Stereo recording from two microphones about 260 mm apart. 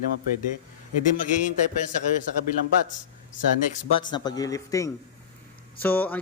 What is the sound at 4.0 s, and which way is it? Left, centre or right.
A man's voice, centre.